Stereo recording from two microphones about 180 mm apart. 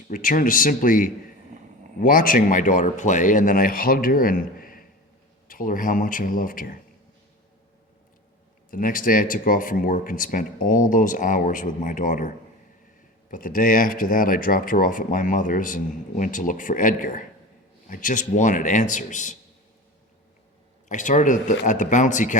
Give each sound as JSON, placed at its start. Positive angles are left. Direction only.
{"t": 0.1, "sound": "speech", "side_deg": 50}
{"t": 8.7, "sound": "speech", "side_deg": 50}
{"t": 13.3, "sound": "speech", "side_deg": 50}
{"t": 20.8, "sound": "speech", "side_deg": 45}